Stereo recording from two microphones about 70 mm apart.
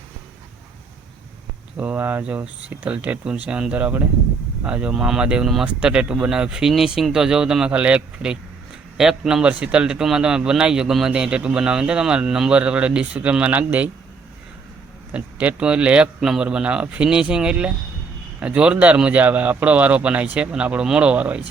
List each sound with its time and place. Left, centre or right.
1.7 s a man's voice: right
15.1 s a man's voice: centre